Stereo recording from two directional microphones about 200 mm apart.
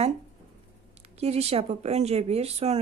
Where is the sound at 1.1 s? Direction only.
30° right (ahead or behind).